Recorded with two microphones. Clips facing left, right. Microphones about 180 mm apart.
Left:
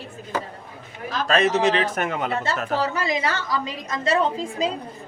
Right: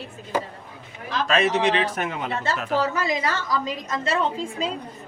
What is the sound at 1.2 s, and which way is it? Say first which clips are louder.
Speech: left 2 dB; 40° left (ahead or behind).